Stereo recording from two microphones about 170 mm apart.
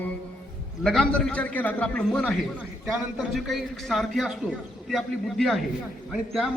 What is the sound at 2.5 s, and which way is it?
A man's voice, 5° right (ahead or behind).